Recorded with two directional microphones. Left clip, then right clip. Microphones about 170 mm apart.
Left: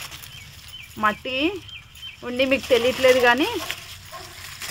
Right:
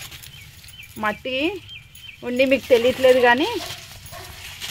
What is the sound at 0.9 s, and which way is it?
Speech, 25° right (ahead or behind).